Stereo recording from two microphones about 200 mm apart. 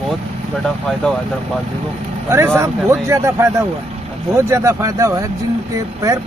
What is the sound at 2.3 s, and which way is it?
Speech, 15° right (ahead or behind).